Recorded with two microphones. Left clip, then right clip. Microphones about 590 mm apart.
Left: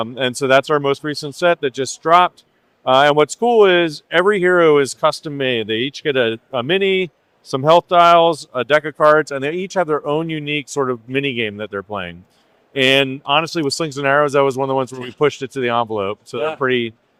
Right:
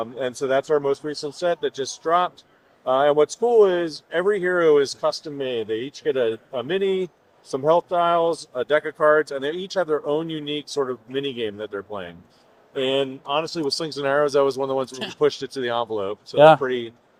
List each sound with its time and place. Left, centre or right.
0.0 s a man's voice: left
11.5 s speech: left
15.2 s speech: left
16.6 s a man's voice: left